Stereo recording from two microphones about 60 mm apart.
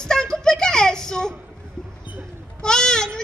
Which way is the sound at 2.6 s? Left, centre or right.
Centre.